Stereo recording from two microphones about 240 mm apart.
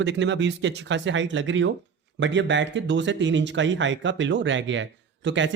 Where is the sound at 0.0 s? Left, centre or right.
Right.